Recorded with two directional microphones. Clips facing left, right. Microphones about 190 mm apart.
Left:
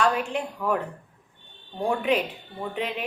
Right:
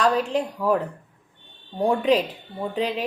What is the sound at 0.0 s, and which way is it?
Speech, 35° right (ahead or behind).